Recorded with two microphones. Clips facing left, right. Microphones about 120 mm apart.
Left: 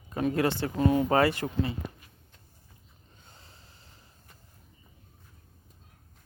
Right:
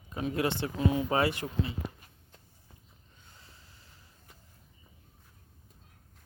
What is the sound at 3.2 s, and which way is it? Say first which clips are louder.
Snort: left 2 dB; 30° left (ahead or behind).